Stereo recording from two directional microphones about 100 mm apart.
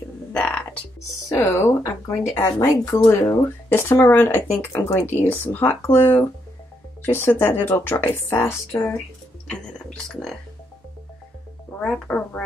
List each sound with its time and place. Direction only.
0.3 s music: 10° left (ahead or behind)
1.5 s speech: 25° left (ahead or behind)
2.7 s speech: 35° left (ahead or behind)
10.0 s music: 5° left (ahead or behind)
11.8 s speech: 15° left (ahead or behind)